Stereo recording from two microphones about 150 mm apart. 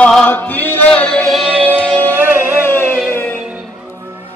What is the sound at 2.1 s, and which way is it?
Music, 15° right (ahead or behind).